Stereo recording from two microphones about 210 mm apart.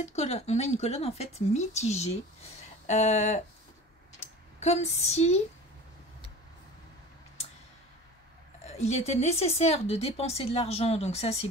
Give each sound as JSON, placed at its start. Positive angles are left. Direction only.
{"t": 0.0, "sound": "speech", "side_deg": 30}
{"t": 8.6, "sound": "speech", "side_deg": 30}